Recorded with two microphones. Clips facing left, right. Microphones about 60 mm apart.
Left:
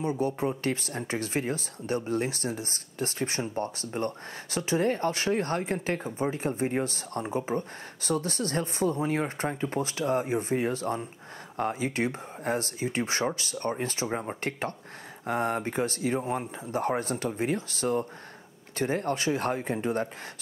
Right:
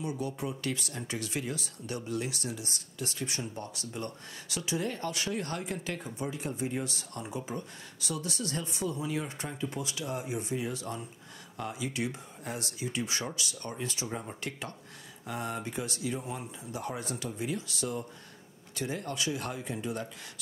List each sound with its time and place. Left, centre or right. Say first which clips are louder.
0.0 s speech: left 7 dB; left